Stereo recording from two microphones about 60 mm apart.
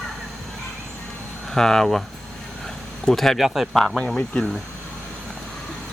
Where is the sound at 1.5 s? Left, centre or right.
Centre.